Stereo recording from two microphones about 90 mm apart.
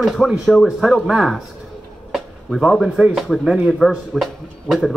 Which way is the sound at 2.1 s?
5° left (ahead or behind).